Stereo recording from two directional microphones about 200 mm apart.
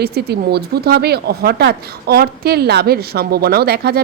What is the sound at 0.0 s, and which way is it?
Speech, 55° right (ahead or behind).